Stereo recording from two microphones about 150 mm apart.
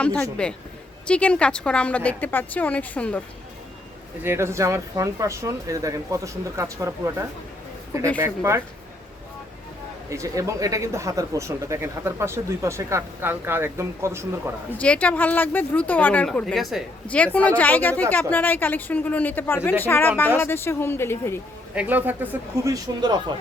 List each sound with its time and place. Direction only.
0.0 s a woman's voice: 5° left (ahead or behind)
4.2 s speech: 15° right (ahead or behind)
10.1 s speech: 20° right (ahead or behind)
14.8 s a woman's voice: 10° left (ahead or behind)
17.2 s a woman's voice: 10° left (ahead or behind)
21.8 s speech: 10° right (ahead or behind); by 23.3 s 30° right (ahead or behind)